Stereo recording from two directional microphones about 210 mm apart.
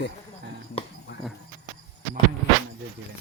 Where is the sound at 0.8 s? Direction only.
25° left (ahead or behind).